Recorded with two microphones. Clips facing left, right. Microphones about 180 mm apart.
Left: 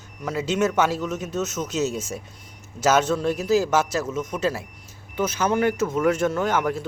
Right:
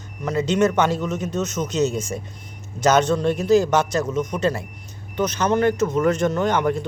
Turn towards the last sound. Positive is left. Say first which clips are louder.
# right 3 dB
turn(degrees=5)  # may be behind; listen again after turning